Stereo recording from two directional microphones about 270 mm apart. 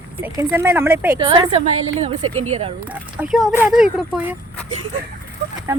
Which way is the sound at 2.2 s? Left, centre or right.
Right.